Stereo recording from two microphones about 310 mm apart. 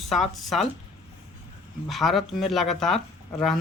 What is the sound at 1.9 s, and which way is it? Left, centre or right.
Speech, centre.